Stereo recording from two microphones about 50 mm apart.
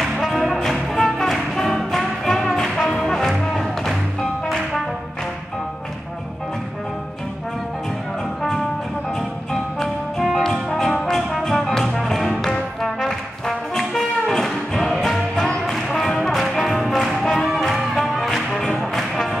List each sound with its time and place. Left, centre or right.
0.0 s music: centre
3.5 s music: centre
8.4 s music: centre
10.4 s brass instrument: centre
12.0 s music: centre
12.3 s brass instrument: centre
15.6 s music: centre